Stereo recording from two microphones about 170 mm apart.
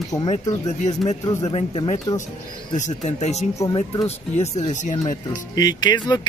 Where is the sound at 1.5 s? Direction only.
35° left (ahead or behind).